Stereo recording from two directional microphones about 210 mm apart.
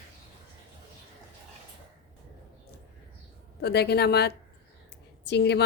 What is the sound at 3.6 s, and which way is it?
A woman's voice, 50° left (ahead or behind).